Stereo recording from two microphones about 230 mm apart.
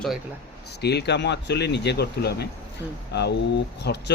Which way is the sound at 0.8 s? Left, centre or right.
Left.